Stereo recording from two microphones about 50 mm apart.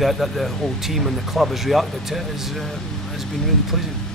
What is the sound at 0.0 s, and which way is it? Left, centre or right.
Speech, centre.